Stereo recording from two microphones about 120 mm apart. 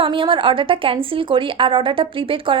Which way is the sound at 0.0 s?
45° right (ahead or behind).